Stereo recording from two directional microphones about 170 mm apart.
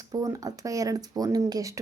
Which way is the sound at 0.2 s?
20° right (ahead or behind).